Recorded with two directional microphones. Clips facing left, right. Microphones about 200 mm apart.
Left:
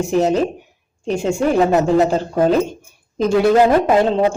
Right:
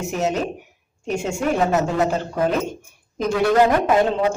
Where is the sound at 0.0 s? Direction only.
35° left (ahead or behind).